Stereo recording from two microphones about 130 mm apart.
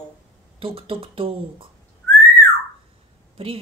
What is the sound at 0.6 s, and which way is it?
Speech, 45° right (ahead or behind).